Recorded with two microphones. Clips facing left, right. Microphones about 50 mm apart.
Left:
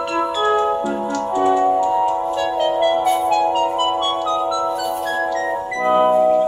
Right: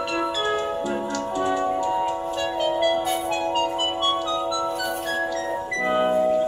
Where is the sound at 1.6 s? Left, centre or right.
Centre.